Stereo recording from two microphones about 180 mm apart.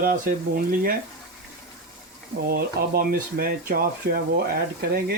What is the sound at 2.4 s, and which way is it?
Speech, 55° right (ahead or behind).